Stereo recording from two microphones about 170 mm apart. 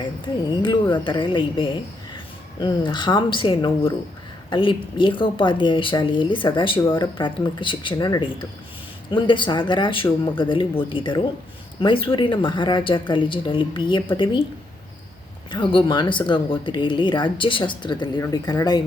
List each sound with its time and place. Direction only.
0.0 s speech: 25° left (ahead or behind)
15.5 s speech: 25° left (ahead or behind)